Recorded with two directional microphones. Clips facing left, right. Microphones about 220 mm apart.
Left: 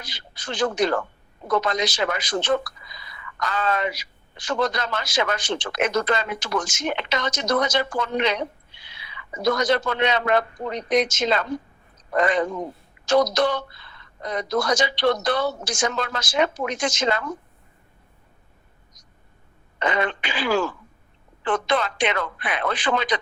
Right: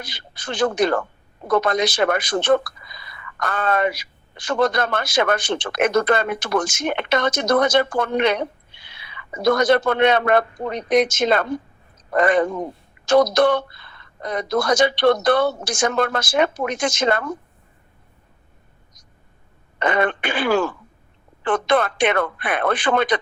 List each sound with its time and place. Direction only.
0.0 s speech: 55° right (ahead or behind)
19.8 s speech: 55° right (ahead or behind)